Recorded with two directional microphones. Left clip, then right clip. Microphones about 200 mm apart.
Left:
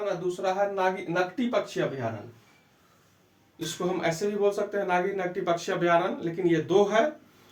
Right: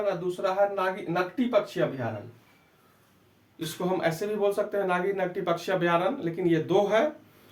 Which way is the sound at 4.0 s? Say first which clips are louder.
Left 1 dB; 25° right (ahead or behind).